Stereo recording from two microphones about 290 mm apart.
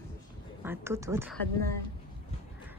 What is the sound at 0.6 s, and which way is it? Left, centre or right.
Speech, centre.